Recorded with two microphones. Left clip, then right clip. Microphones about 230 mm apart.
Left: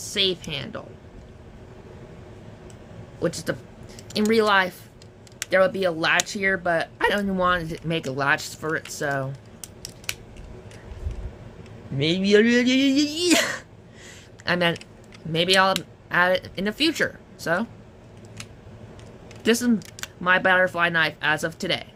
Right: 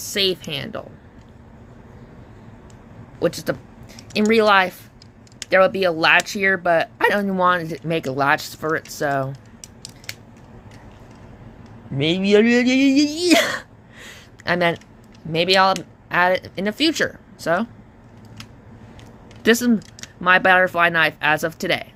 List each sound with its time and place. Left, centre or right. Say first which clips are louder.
0.0 s speech: right 3 dB; centre
3.2 s speech: right 5 dB; centre
11.9 s speech: right 3 dB; centre
19.4 s speech: right 5 dB; centre